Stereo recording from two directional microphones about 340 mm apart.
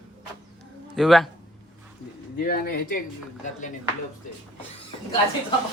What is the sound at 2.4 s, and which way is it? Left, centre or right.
Speech, left.